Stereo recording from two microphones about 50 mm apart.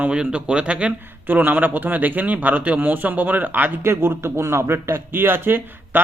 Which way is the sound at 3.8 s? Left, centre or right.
Right.